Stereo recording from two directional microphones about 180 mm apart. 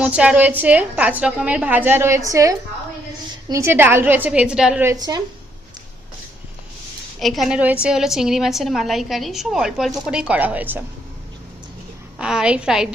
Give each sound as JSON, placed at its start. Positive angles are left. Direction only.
{"t": 0.0, "sound": "a woman's voice", "side_deg": -5}
{"t": 4.8, "sound": "a woman's voice", "side_deg": -20}
{"t": 7.2, "sound": "a woman's voice", "side_deg": 0}
{"t": 12.2, "sound": "a woman's voice", "side_deg": -5}